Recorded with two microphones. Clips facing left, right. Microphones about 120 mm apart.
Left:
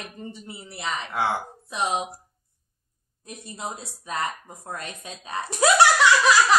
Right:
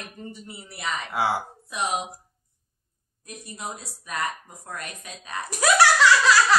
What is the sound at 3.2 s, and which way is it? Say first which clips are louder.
A woman's voice: left 1 dB; 25° left (ahead or behind).